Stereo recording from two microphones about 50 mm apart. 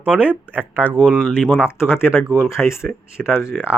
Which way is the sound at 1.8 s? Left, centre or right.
Left.